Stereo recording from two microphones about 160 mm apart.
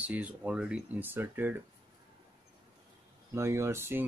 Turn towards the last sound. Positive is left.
turn(degrees=-15)  # may be behind; listen again after turning